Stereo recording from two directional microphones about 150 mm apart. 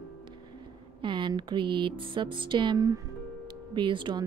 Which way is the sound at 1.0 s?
35° right (ahead or behind).